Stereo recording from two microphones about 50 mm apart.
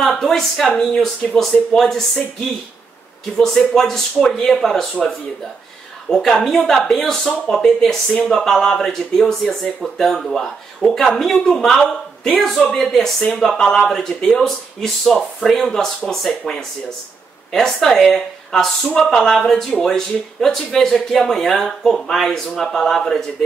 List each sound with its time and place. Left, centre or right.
0.0 s a sound: centre
0.7 s speech: centre
3.4 s speech: centre
6.0 s speech: centre